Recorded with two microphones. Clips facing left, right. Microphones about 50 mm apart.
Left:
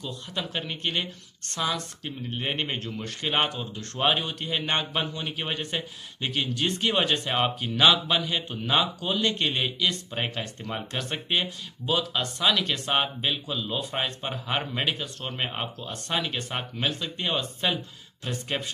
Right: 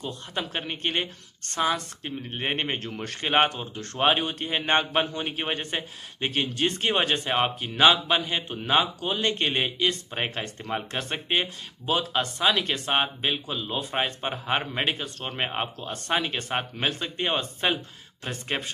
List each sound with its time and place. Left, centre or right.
0.0 s speech: right